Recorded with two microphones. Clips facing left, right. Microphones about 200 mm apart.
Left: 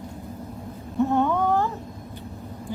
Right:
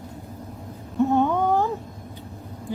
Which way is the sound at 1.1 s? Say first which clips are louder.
Right 1 dB; 15° right (ahead or behind).